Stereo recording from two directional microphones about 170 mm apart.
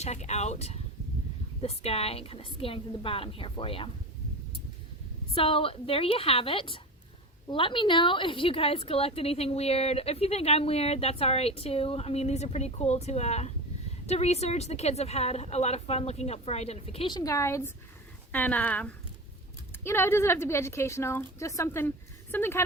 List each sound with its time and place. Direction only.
0.0 s a woman's voice: 40° left (ahead or behind)
5.3 s a woman's voice: 35° left (ahead or behind); by 22.6 s 15° left (ahead or behind)